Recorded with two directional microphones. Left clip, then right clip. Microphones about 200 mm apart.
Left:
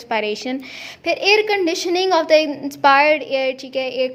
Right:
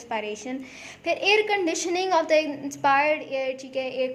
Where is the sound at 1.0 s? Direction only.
30° left (ahead or behind).